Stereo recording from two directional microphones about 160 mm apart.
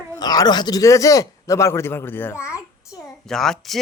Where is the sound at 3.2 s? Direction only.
5° left (ahead or behind).